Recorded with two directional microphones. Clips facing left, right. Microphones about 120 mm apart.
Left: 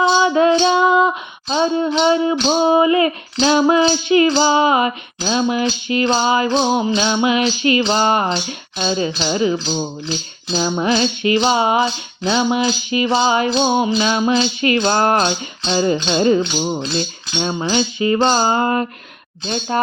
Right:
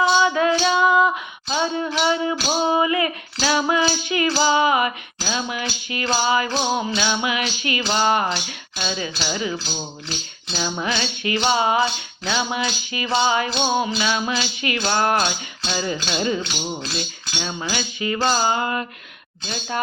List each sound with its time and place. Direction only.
0.0 s music: 30° left (ahead or behind)
0.6 s female singing: 25° left (ahead or behind)
2.0 s music: 25° left (ahead or behind)
9.2 s cutlery: 30° left (ahead or behind)
10.5 s music: 30° left (ahead or behind)
14.0 s cutlery: 30° left (ahead or behind)